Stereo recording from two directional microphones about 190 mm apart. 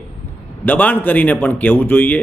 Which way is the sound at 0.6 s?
10° left (ahead or behind).